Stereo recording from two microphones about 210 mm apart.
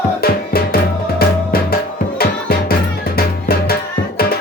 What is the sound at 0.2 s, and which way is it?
Music, 45° left (ahead or behind).